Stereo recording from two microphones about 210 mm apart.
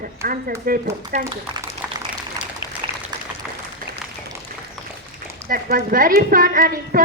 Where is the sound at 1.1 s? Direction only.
30° right (ahead or behind).